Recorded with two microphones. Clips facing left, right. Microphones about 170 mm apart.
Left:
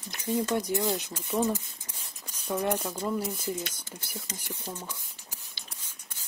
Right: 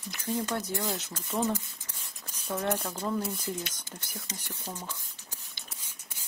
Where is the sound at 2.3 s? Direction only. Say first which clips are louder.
Left 2 dB; 5° left (ahead or behind).